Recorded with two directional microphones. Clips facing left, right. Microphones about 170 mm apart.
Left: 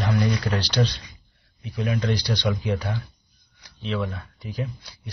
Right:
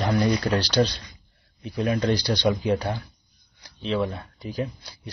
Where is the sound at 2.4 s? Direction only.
30° right (ahead or behind).